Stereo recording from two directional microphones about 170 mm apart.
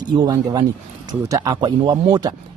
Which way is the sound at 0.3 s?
25° right (ahead or behind).